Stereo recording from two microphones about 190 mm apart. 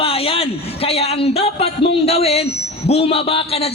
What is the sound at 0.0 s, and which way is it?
A man's voice, 30° left (ahead or behind).